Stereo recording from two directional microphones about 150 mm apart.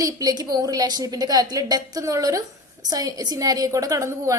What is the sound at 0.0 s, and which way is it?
A woman's voice, 25° right (ahead or behind).